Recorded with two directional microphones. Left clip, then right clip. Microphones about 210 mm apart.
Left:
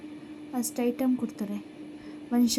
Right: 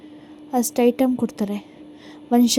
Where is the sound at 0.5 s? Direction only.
45° right (ahead or behind).